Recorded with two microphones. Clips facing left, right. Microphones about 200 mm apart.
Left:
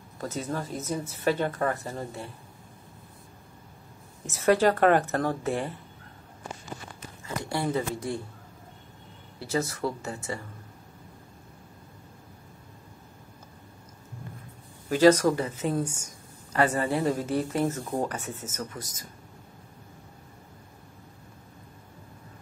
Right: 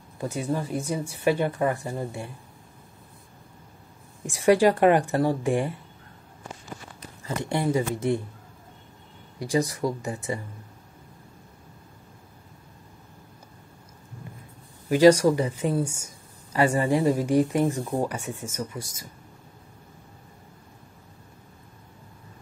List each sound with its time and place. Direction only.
0.2 s speech: 15° right (ahead or behind)
4.3 s speech: 15° right (ahead or behind)
7.4 s speech: 20° right (ahead or behind)
9.4 s speech: 15° right (ahead or behind)
14.9 s speech: 10° right (ahead or behind)